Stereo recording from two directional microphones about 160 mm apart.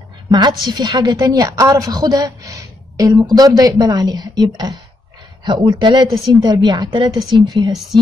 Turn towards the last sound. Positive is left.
turn(degrees=-25)  # may be behind; listen again after turning